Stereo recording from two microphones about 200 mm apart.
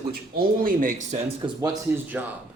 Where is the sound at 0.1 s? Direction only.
45° right (ahead or behind).